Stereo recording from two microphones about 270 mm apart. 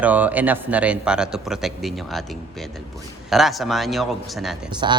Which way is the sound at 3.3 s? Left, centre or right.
Centre.